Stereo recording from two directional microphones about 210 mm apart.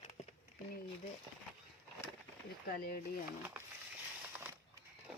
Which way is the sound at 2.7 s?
45° left (ahead or behind).